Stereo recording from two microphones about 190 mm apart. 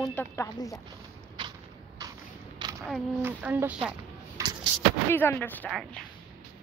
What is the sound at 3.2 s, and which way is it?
Speech, 10° right (ahead or behind).